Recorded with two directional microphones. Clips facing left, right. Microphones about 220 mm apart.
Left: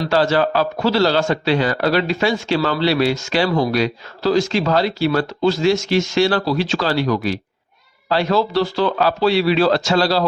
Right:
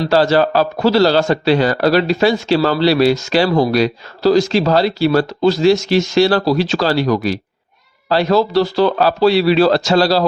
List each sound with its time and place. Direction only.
0.0 s a man's voice: 35° right (ahead or behind)